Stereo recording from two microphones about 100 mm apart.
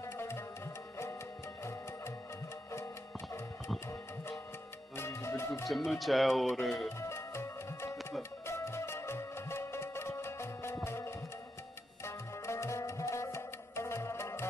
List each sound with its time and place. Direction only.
0.0 s tabla: 25° left (ahead or behind)
1.6 s music: 30° left (ahead or behind)
4.9 s music: 25° left (ahead or behind)
5.9 s speech: centre (ahead or behind)
7.0 s music: 30° left (ahead or behind)